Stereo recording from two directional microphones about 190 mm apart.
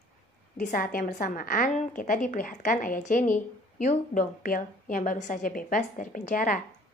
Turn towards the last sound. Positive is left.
turn(degrees=45)  # may be behind; listen again after turning